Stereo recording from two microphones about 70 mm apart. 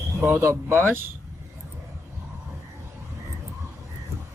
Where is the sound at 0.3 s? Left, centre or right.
Right.